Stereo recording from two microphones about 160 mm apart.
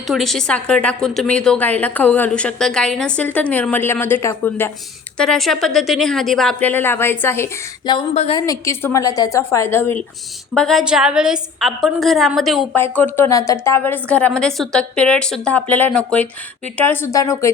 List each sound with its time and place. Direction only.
0.1 s a woman's voice: centre (ahead or behind)
8.1 s a woman's voice: 45° left (ahead or behind)
8.4 s a woman's voice: 20° left (ahead or behind)
10.5 s a woman's voice: 5° left (ahead or behind)
12.7 s a woman's voice: 10° left (ahead or behind)